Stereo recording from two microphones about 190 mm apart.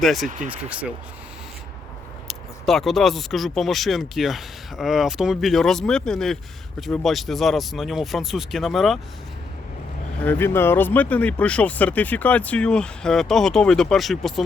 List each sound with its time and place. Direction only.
0.0 s speech: centre (ahead or behind)
0.3 s speech: 40° right (ahead or behind)
0.7 s speech: 5° right (ahead or behind)
2.2 s speech: centre (ahead or behind)
10.2 s speech: 10° left (ahead or behind)